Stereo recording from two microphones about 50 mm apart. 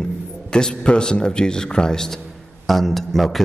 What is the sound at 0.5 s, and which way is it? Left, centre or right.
A man's voice, centre.